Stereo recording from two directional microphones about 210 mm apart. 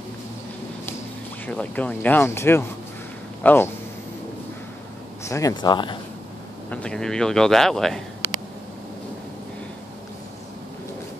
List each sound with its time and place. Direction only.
1.4 s speech: 5° left (ahead or behind)
5.2 s speech: 15° left (ahead or behind)
6.7 s speech: 5° left (ahead or behind)